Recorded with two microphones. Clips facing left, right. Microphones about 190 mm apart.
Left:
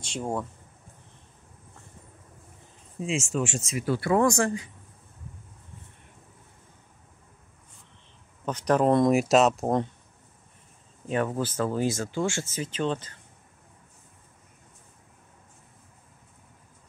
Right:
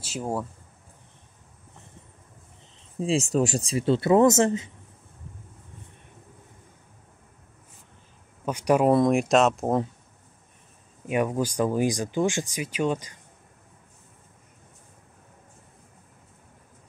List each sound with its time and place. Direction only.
0.0 s speech: 5° right (ahead or behind)
3.0 s speech: 35° right (ahead or behind)
8.5 s speech: 10° right (ahead or behind)
11.1 s speech: 15° right (ahead or behind)